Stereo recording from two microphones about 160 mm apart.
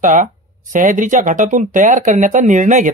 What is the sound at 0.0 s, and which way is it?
Speech, 50° right (ahead or behind).